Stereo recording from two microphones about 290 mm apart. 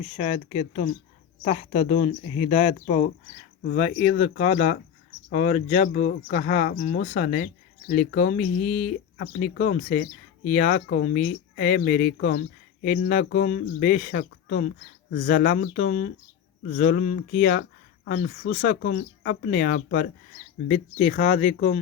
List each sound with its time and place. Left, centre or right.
0.0 s speech: left